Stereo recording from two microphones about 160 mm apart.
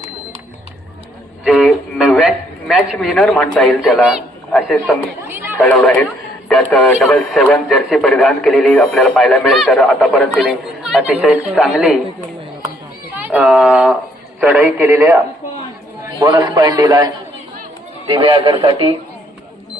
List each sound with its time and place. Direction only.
1.5 s music: centre (ahead or behind)
2.6 s speech: centre (ahead or behind)
5.3 s chatter: 15° right (ahead or behind)
5.6 s a man's voice: 10° left (ahead or behind); by 11.9 s 5° right (ahead or behind)
13.1 s a man's voice: 10° right (ahead or behind)
16.1 s a man's voice: 30° right (ahead or behind)
18.1 s speech: 35° right (ahead or behind)